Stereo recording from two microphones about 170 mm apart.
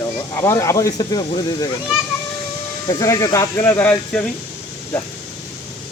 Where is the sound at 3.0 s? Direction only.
20° left (ahead or behind).